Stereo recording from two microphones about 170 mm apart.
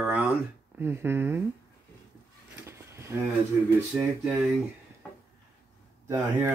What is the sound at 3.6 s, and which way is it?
Speech, 5° right (ahead or behind).